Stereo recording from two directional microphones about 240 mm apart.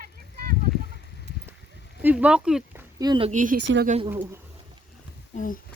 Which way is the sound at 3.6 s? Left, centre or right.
Right.